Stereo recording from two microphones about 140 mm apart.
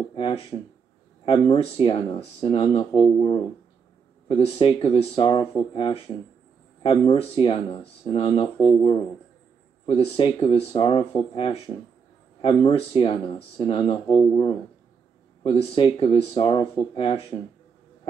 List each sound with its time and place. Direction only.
0.1 s speech: 40° left (ahead or behind)
9.8 s speech: 40° left (ahead or behind)
15.4 s speech: 40° left (ahead or behind)